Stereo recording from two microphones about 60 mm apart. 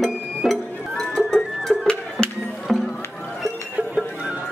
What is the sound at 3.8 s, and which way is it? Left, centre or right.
Music, right.